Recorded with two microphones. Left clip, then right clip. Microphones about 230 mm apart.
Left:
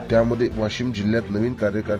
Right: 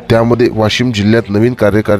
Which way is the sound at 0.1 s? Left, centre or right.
Right.